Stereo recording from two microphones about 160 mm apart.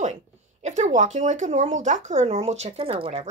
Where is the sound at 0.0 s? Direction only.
45° right (ahead or behind).